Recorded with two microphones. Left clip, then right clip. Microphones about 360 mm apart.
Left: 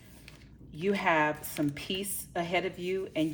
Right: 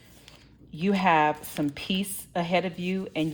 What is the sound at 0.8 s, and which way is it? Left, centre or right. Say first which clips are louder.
A woman's voice: right 5 dB; right.